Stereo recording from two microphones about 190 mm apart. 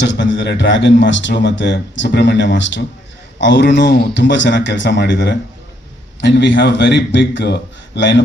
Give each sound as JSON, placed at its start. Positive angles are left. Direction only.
{"t": 0.0, "sound": "a man's voice", "side_deg": 70}